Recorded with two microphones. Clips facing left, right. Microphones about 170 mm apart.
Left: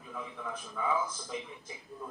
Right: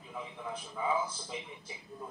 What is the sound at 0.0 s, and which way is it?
A man's voice, 20° right (ahead or behind).